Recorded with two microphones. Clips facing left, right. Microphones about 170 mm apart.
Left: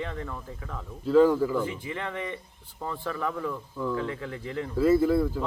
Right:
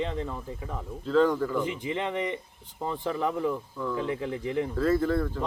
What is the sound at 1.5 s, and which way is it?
A man's voice, 20° right (ahead or behind).